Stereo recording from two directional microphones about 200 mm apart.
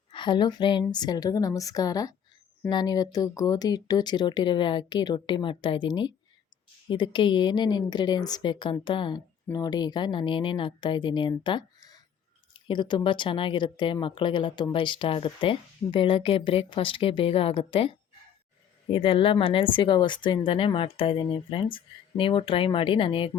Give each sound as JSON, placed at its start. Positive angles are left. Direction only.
{"t": 0.1, "sound": "speech", "side_deg": 25}